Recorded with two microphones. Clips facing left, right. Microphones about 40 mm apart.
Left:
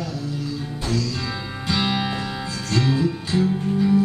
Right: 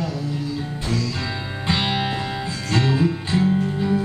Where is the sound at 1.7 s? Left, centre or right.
Right.